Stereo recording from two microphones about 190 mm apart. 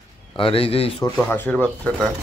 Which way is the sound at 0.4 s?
30° left (ahead or behind).